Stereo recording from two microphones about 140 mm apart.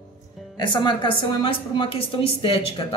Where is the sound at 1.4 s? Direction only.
40° left (ahead or behind).